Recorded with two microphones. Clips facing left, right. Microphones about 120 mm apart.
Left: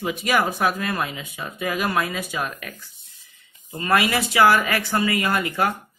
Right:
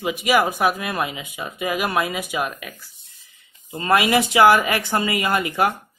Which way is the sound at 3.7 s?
25° right (ahead or behind).